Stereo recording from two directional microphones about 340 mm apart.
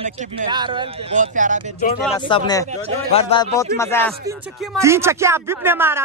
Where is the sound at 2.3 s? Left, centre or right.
Centre.